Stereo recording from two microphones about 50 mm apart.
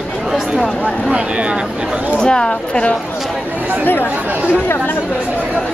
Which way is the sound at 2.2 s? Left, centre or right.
Centre.